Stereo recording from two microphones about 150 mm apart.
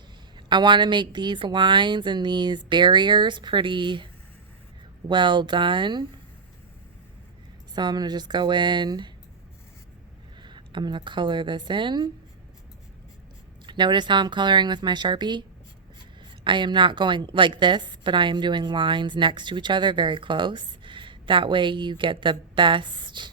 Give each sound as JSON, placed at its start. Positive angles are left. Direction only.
{"t": 0.3, "sound": "a woman's voice", "side_deg": -30}
{"t": 7.8, "sound": "speech", "side_deg": -30}
{"t": 10.4, "sound": "speech", "side_deg": -30}
{"t": 13.7, "sound": "a woman's voice", "side_deg": -30}